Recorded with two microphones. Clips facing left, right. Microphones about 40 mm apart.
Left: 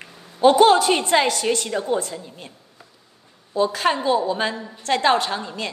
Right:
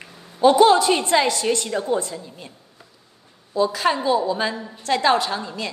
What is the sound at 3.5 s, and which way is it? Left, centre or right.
A woman's voice, left.